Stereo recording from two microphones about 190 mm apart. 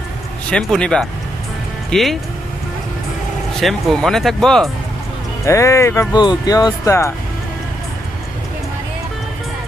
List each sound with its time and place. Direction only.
0.5 s speech: 5° left (ahead or behind)
3.6 s speech: centre (ahead or behind)
5.5 s speech: 15° left (ahead or behind)